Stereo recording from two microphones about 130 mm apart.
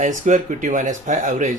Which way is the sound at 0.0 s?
80° right.